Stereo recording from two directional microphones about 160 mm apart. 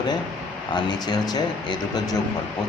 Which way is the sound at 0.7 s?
25° left (ahead or behind).